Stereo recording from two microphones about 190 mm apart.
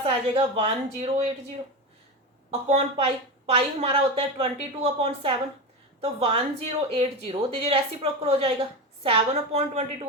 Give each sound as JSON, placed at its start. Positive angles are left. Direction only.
{"t": 0.0, "sound": "a woman's voice", "side_deg": -30}
{"t": 2.5, "sound": "a woman's voice", "side_deg": -30}